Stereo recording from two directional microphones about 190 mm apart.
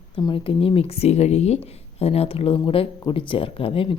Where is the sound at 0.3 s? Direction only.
30° left (ahead or behind).